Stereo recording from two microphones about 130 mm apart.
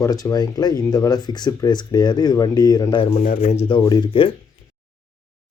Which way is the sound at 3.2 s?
80° left.